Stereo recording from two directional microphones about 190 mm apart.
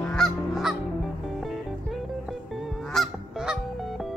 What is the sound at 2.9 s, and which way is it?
Goose, centre (ahead or behind).